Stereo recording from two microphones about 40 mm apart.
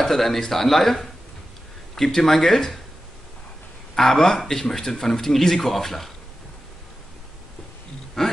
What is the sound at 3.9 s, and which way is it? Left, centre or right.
A man's voice, centre.